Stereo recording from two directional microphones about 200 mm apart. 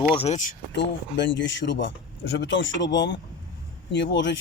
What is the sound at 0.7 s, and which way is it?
Speech, 60° left (ahead or behind).